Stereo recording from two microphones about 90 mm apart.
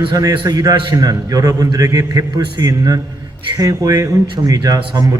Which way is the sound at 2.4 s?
55° right (ahead or behind).